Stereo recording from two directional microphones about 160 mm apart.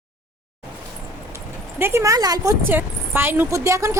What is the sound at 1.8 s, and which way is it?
A woman's voice, 15° right (ahead or behind).